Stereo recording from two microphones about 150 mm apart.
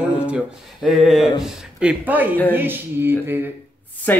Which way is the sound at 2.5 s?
15° right (ahead or behind).